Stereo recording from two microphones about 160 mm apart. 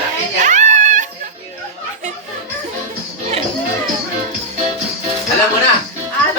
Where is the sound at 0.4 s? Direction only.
50° right (ahead or behind).